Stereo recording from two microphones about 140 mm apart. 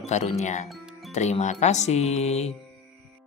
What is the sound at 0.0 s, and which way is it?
Speech, 55° left (ahead or behind).